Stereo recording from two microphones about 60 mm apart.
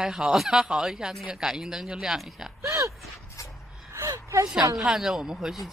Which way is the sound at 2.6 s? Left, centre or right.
Right.